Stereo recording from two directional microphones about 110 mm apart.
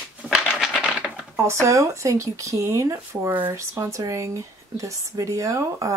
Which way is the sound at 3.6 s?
30° right (ahead or behind).